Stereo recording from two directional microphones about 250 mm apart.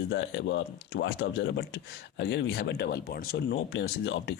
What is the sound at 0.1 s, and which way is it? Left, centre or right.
Speech, left.